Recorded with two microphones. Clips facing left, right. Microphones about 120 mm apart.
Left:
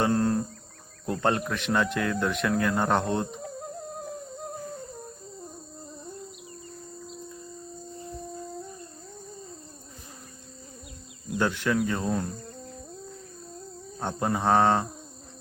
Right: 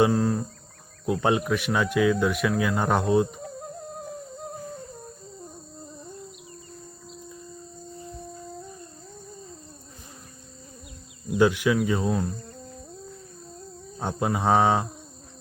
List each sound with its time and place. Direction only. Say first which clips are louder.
0.0 s a sound: right 3 dB; centre (ahead or behind)
1.0 s cricket: right 3 dB; 5° right (ahead or behind)
11.3 s cricket: right 5 dB; 10° right (ahead or behind)
14.0 s cricket: right 1 dB; 5° right (ahead or behind)